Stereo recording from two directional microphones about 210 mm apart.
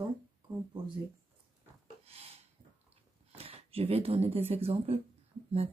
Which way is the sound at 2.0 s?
30° right (ahead or behind).